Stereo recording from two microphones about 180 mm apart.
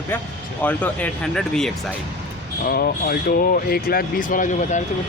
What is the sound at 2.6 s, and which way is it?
Speech, 60° left (ahead or behind).